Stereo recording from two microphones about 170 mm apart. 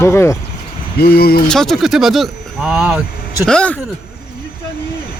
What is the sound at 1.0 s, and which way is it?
Speech, 65° left (ahead or behind).